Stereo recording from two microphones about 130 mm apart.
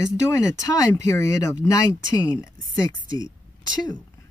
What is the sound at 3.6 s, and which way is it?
Speech, 30° left (ahead or behind).